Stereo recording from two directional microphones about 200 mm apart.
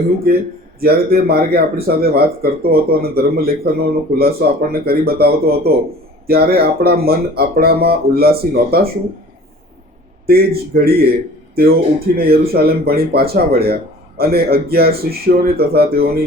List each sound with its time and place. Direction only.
0.8 s speech: 50° right (ahead or behind)
10.2 s speech: 50° right (ahead or behind)